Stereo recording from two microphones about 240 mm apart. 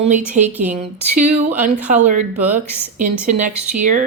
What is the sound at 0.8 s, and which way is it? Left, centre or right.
Speech, right.